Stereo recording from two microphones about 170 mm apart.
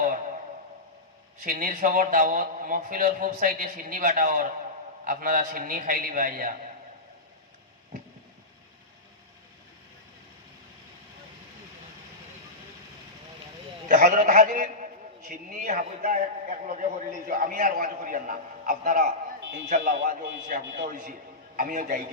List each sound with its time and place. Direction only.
1.5 s a man's voice: 50° right (ahead or behind)
13.8 s a man's voice: 50° right (ahead or behind)